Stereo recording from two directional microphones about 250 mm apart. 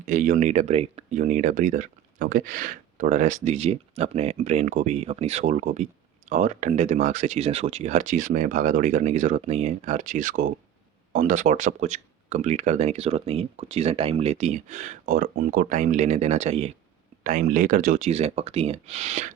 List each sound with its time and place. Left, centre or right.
0.0 s speech: right